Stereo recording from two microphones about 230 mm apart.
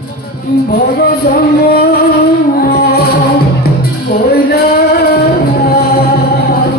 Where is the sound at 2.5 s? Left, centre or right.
Left.